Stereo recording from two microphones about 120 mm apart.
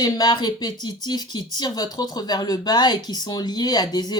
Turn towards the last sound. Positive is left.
turn(degrees=35)  # may be behind; listen again after turning